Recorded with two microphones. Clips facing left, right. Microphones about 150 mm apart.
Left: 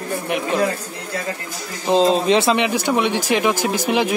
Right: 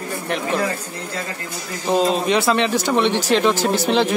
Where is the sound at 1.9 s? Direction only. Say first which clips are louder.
Left 3 dB; 25° left (ahead or behind).